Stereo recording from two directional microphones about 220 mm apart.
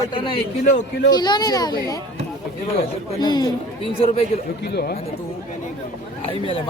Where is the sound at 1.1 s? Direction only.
20° left (ahead or behind).